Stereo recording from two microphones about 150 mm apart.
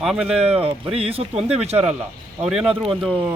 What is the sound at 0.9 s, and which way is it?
Speech, 40° right (ahead or behind).